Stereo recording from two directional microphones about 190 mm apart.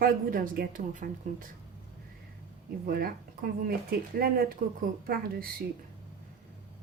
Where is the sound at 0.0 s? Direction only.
45° right (ahead or behind).